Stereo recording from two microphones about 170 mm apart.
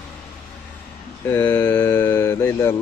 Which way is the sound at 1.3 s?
15° left (ahead or behind).